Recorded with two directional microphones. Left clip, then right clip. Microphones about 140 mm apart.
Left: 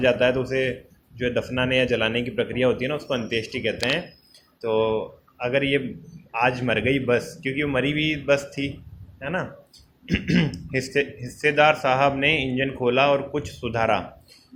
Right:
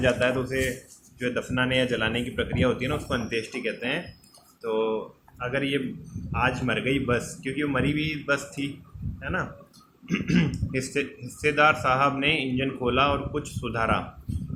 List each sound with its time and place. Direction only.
0.0 s speech: 25° left (ahead or behind)